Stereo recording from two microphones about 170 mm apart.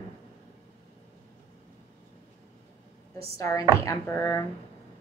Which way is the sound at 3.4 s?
20° left (ahead or behind).